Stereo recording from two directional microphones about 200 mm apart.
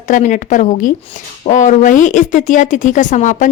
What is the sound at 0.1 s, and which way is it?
Speech, 40° left (ahead or behind).